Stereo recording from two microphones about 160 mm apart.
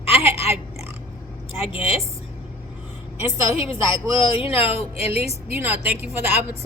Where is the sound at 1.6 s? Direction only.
35° left (ahead or behind).